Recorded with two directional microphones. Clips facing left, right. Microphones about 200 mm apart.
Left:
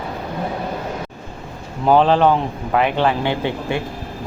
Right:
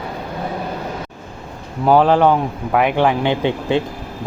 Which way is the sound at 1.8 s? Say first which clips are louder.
Right 1 dB; 10° right (ahead or behind).